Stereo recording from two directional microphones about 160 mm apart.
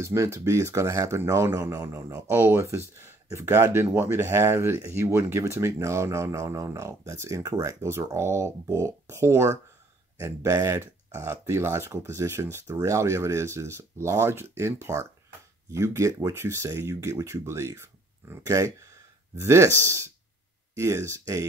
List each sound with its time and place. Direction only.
0.0 s speech: 15° right (ahead or behind)